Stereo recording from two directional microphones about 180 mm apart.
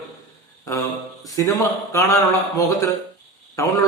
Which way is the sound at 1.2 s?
20° left (ahead or behind).